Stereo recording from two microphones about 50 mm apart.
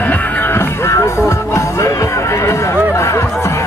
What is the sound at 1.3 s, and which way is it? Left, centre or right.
Music, left.